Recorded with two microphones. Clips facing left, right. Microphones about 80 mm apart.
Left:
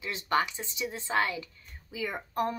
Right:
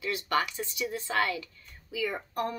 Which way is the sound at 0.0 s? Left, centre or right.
Left.